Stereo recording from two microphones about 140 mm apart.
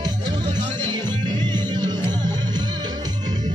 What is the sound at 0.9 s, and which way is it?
Music, 30° right (ahead or behind).